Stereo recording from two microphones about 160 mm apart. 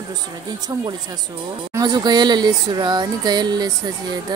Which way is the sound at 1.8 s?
25° right (ahead or behind).